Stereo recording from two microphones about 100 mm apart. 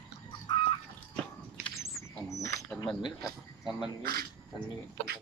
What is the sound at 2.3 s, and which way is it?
Cricket, 35° left (ahead or behind).